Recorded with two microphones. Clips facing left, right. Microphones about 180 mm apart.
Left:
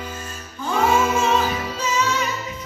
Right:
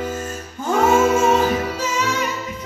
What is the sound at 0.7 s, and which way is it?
Music, 45° right (ahead or behind).